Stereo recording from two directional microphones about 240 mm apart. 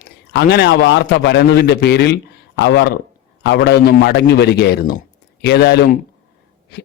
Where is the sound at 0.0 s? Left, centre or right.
Left.